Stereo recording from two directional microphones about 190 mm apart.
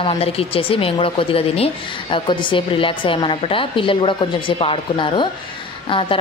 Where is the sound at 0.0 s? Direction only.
30° left (ahead or behind).